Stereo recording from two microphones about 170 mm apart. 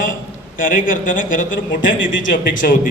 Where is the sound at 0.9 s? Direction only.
50° left (ahead or behind).